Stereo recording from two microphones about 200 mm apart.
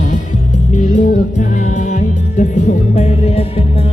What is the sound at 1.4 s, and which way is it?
Music, 40° left (ahead or behind).